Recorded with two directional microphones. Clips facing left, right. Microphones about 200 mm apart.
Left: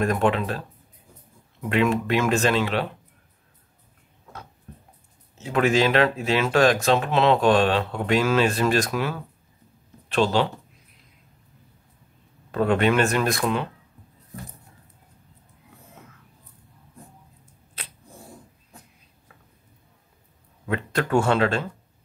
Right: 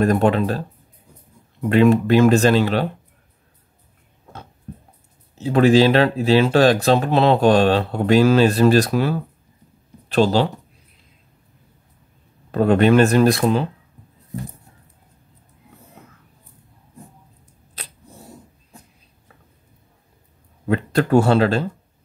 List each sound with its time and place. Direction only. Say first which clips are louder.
0.0 s speech: right 5 dB; 35° right (ahead or behind)
1.7 s speech: right 8 dB; 35° right (ahead or behind)
5.4 s speech: right 7 dB; 35° right (ahead or behind)
12.4 s speech: right 6 dB; 40° right (ahead or behind)
17.8 s a sound: right 3 dB; 40° right (ahead or behind)
20.6 s speech: right 6 dB; 35° right (ahead or behind)